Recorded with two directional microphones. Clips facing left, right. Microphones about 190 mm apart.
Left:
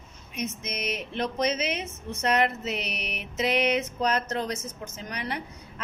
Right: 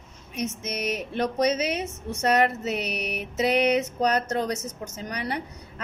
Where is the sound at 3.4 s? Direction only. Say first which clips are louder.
Right 3 dB; 35° right (ahead or behind).